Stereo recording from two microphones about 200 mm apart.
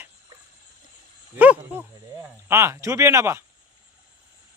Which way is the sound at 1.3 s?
10° right (ahead or behind).